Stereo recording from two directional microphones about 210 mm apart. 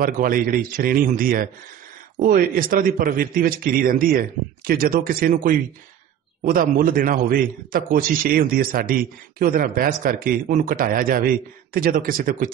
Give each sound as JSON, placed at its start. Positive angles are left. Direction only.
{"t": 0.0, "sound": "a man's voice", "side_deg": -40}